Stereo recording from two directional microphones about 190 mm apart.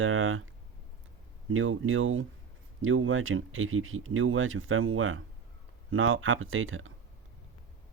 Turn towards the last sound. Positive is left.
turn(degrees=-90)